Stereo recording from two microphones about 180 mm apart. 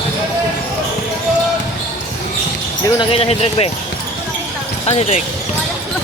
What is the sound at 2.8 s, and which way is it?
Basketball bounce, 25° left (ahead or behind).